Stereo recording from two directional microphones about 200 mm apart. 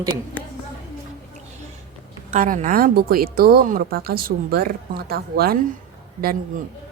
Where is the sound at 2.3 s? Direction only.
40° right (ahead or behind).